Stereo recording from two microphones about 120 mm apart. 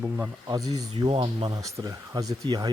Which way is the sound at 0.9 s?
45° right (ahead or behind).